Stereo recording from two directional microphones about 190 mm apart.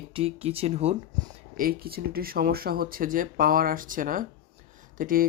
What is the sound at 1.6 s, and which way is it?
Speech, 50° right (ahead or behind).